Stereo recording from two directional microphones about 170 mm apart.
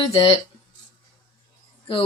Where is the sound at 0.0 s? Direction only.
35° left (ahead or behind).